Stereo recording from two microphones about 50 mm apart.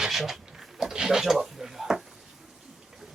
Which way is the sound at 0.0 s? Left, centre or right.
Centre.